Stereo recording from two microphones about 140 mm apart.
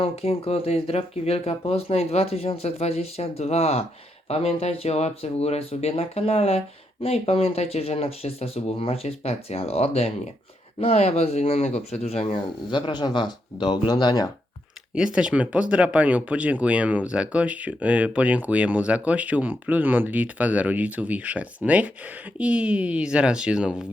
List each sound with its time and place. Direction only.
0.0 s speech: 45° left (ahead or behind)
12.7 s speech: 35° left (ahead or behind)
14.9 s speech: 5° right (ahead or behind)